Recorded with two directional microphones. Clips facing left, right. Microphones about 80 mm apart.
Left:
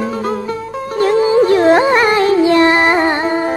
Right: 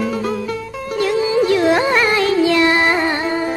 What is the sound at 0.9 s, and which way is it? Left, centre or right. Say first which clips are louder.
Music: left 5 dB; left.